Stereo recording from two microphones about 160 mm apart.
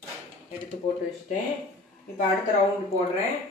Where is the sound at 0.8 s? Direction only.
40° left (ahead or behind).